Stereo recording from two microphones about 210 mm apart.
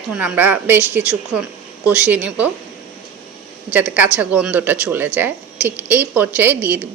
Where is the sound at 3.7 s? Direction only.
5° right (ahead or behind).